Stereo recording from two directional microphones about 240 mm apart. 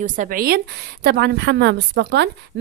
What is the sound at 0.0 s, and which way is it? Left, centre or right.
A woman's voice, right.